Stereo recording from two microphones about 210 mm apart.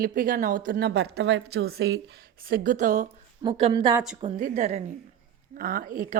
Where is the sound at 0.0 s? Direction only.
40° right (ahead or behind).